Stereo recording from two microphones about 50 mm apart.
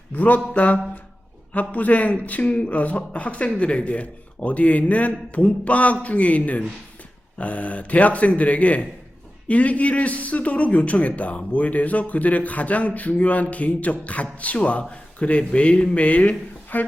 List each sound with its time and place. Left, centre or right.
0.1 s a man's voice: left